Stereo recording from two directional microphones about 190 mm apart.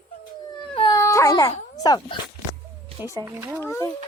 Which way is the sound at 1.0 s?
15° left (ahead or behind).